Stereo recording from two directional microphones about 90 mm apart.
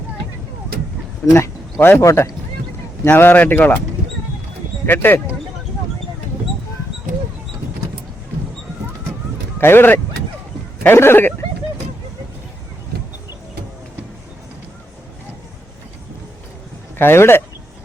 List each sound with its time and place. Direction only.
1.8 s speech: 25° left (ahead or behind)
2.0 s speech: 35° left (ahead or behind)
3.0 s speech: 25° left (ahead or behind)
4.9 s speech: 20° left (ahead or behind)
9.6 s speech: 25° left (ahead or behind)
17.0 s speech: 25° left (ahead or behind)